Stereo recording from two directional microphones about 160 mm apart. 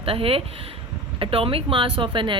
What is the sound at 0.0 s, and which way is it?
Speech, 35° right (ahead or behind).